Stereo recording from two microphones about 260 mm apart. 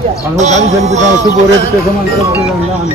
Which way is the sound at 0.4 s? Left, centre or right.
Right.